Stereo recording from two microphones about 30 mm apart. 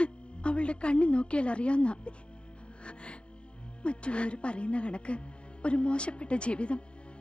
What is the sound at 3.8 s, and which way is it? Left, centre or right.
Speech, left.